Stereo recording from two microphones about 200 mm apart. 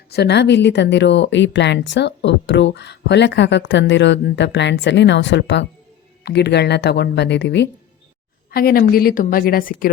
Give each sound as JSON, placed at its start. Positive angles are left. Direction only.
{"t": 0.1, "sound": "a woman's voice", "side_deg": 55}
{"t": 8.4, "sound": "a woman's voice", "side_deg": 50}